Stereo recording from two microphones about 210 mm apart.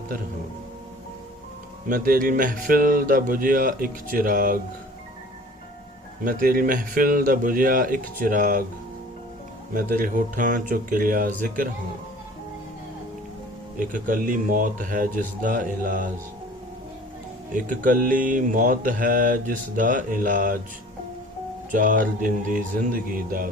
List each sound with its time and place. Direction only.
1.9 s speech: 40° right (ahead or behind)
6.2 s speech: 40° right (ahead or behind)
9.7 s speech: 40° right (ahead or behind)
13.7 s speech: 40° right (ahead or behind)
17.5 s speech: 40° right (ahead or behind)
21.7 s speech: 40° right (ahead or behind)